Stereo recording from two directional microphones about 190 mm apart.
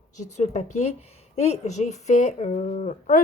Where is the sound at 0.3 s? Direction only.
35° left (ahead or behind).